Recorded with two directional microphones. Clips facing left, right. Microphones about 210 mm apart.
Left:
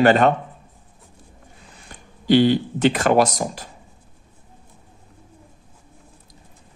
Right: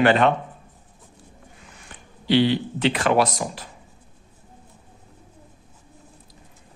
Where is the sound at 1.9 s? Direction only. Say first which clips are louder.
Left 4 dB; 45° left (ahead or behind).